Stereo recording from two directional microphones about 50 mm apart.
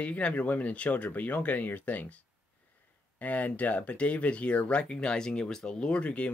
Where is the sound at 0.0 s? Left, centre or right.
Left.